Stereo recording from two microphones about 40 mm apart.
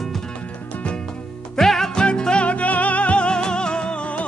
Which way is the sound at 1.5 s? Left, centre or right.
Centre.